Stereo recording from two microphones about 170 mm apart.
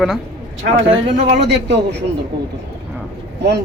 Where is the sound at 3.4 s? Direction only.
85° right.